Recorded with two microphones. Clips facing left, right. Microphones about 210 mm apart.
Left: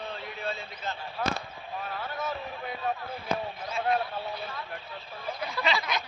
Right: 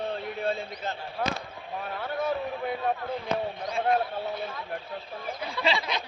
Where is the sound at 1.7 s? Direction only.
55° right (ahead or behind).